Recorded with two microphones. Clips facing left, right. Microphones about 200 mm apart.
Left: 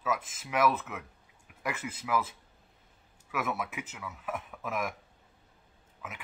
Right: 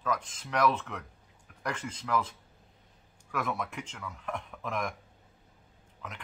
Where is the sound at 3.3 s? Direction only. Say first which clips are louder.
Even; 5° left (ahead or behind).